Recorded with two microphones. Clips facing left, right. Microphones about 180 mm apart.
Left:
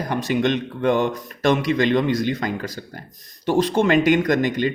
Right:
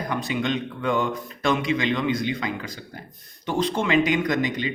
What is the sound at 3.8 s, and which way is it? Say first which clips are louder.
Speech: left 4 dB; 45° left (ahead or behind).